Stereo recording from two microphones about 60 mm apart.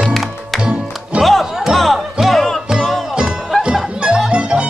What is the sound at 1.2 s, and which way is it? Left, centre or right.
Music, centre.